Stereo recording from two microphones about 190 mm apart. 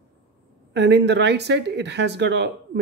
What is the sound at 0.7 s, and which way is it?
Speech, 65° right (ahead or behind).